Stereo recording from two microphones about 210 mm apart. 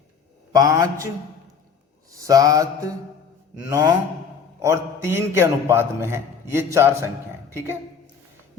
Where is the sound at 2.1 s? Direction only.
15° right (ahead or behind).